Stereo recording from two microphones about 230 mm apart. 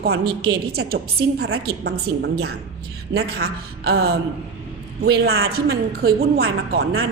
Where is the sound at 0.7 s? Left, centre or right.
Right.